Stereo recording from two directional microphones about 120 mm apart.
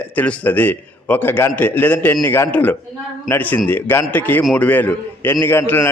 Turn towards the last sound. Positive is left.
turn(degrees=20)  # may be behind; listen again after turning